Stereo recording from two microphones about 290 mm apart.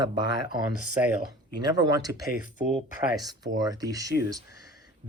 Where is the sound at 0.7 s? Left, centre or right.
Right.